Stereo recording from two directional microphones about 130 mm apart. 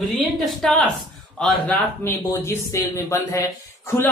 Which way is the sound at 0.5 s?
5° left (ahead or behind).